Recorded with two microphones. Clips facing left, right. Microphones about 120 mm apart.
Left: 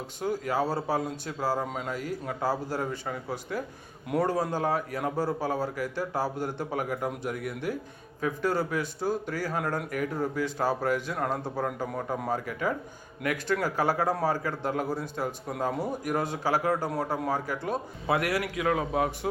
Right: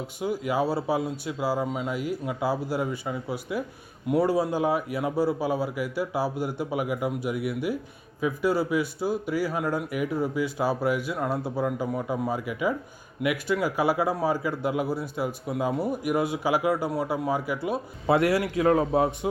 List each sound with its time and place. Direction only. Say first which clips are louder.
0.2 s a man's voice: right 2 dB; 10° right (ahead or behind)
18.1 s a man's voice: right 5 dB; 25° right (ahead or behind)